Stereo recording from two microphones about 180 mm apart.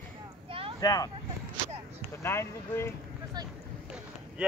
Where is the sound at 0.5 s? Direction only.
30° right (ahead or behind).